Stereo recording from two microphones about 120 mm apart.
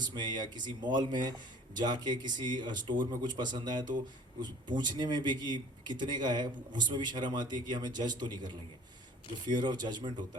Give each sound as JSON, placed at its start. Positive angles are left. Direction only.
{"t": 0.0, "sound": "speech", "side_deg": -40}